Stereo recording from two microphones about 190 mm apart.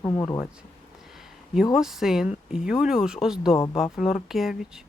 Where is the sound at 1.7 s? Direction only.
Centre (ahead or behind).